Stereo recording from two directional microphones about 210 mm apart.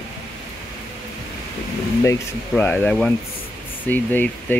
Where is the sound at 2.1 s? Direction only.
10° left (ahead or behind).